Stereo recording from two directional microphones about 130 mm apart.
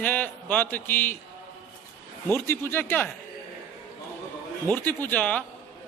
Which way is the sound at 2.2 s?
15° left (ahead or behind).